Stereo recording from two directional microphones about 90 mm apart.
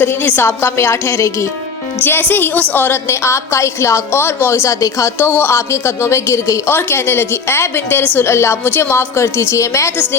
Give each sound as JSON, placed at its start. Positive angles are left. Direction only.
{"t": 0.0, "sound": "a woman's voice", "side_deg": 25}